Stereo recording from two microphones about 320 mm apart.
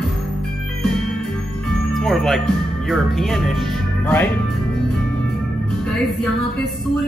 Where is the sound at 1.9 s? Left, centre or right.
Centre.